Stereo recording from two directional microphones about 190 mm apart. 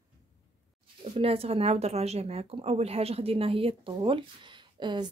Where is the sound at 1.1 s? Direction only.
30° right (ahead or behind).